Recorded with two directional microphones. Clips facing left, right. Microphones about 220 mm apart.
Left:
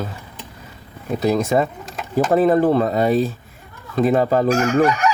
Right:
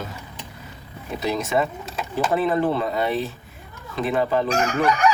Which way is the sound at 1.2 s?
40° left (ahead or behind).